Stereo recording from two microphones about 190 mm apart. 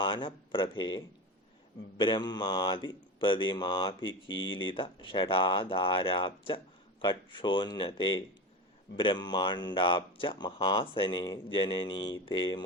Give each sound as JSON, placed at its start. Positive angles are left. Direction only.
{"t": 0.0, "sound": "speech", "side_deg": 25}
{"t": 4.3, "sound": "speech", "side_deg": 90}
{"t": 4.5, "sound": "speech", "side_deg": 25}